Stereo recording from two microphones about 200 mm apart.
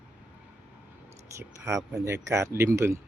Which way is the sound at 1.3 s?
15° right (ahead or behind).